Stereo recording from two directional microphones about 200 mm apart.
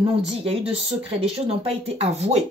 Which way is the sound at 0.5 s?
30° right (ahead or behind).